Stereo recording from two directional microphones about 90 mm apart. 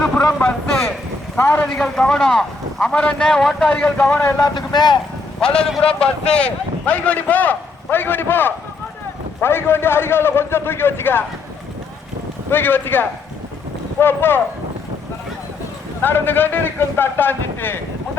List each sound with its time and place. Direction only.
0.3 s speech: 15° left (ahead or behind)
1.4 s a man's voice: 30° left (ahead or behind)
1.6 s speech: 5° left (ahead or behind)
4.1 s a man's voice: 20° left (ahead or behind)
4.4 s a man's voice: 50° left (ahead or behind)
5.4 s a man's voice: 10° left (ahead or behind); by 11.2 s 25° left (ahead or behind)
12.5 s a man's voice: 25° left (ahead or behind)
16.0 s a man's voice: 20° left (ahead or behind)